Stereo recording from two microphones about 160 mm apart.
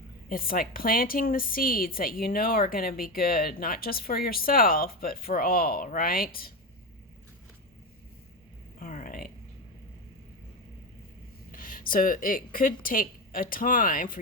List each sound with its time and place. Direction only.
0.3 s a woman's voice: 65° left (ahead or behind)
8.8 s a sound: 60° left (ahead or behind)
11.5 s a woman's voice: 60° left (ahead or behind)